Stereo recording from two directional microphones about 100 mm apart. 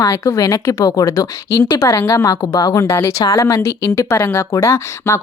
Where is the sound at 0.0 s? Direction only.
35° left (ahead or behind).